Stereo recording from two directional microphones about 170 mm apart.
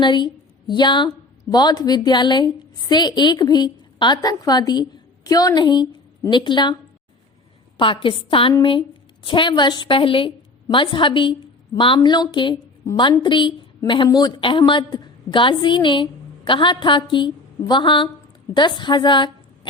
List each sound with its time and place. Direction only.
0.0 s a woman's voice: 25° left (ahead or behind)
7.8 s a woman's voice: 30° left (ahead or behind)